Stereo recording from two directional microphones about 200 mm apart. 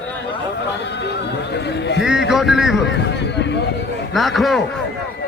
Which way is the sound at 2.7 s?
60° left (ahead or behind).